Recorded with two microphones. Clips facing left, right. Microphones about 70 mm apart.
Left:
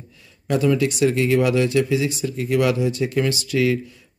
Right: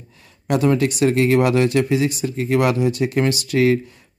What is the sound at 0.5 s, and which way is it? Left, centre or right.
Speech, right.